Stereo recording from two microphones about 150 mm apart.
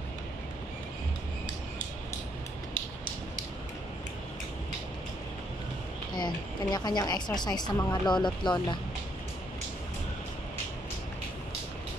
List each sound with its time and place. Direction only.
6.1 s speech: 30° left (ahead or behind)